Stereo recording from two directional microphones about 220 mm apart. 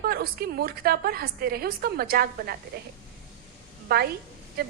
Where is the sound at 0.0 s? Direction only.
45° right (ahead or behind).